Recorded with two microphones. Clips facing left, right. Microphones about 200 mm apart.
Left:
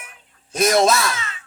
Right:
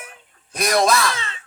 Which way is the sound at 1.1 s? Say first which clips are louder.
Even; 30° right (ahead or behind).